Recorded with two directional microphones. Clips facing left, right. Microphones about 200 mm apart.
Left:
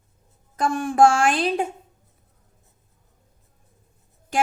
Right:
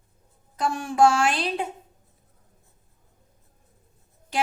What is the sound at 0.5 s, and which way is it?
A woman's voice, 50° left (ahead or behind).